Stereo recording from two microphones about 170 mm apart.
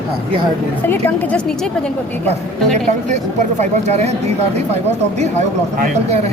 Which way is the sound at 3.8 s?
40° right (ahead or behind).